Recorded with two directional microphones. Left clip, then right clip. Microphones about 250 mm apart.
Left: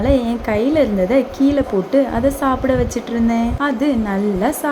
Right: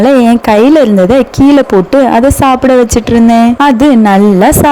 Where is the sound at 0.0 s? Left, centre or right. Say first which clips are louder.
Right 11 dB; right.